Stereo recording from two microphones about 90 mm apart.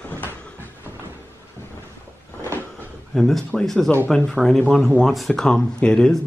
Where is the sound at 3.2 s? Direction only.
Centre (ahead or behind).